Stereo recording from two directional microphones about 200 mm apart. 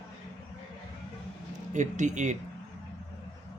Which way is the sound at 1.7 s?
35° right (ahead or behind).